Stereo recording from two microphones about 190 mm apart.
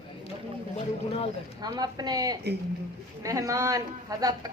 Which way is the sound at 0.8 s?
30° left (ahead or behind).